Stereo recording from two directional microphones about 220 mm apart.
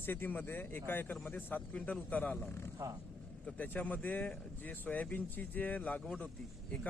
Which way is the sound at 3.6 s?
5° left (ahead or behind).